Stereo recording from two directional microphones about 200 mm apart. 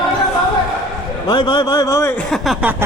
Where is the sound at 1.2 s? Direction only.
20° left (ahead or behind).